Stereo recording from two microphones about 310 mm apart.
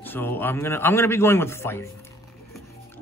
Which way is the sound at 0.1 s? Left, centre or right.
Centre.